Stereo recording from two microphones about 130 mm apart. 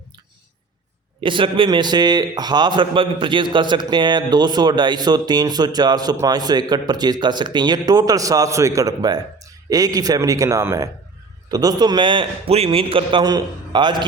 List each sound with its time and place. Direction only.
1.2 s a man's voice: 40° right (ahead or behind)